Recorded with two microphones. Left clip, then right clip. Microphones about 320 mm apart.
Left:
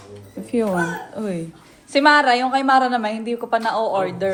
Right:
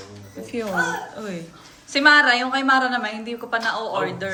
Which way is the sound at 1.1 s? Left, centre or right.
Centre.